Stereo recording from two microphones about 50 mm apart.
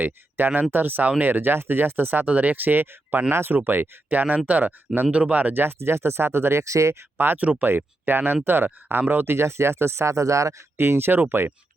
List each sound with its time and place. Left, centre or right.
0.0 s speech: right
5.5 s speech: right
7.2 s speech: right
10.8 s speech: right